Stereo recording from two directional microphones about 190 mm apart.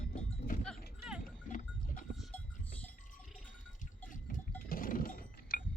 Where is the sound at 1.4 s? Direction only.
45° left (ahead or behind).